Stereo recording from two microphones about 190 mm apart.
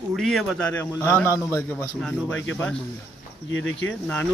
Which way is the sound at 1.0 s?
10° left (ahead or behind).